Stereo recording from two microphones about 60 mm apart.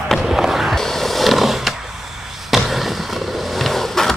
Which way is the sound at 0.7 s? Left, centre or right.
Centre.